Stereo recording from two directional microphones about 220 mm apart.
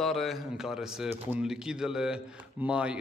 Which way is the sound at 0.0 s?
Centre (ahead or behind).